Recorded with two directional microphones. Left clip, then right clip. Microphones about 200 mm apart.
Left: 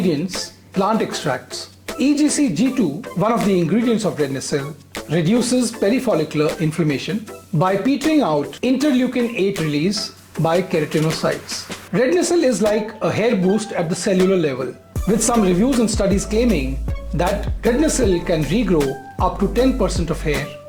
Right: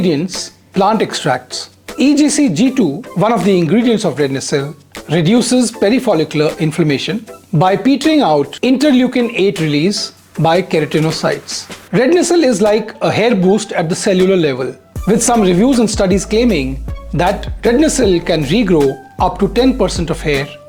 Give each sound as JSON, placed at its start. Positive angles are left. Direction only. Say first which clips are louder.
{"t": 0.7, "sound": "speech", "louder": "right 6 dB", "side_deg": -35}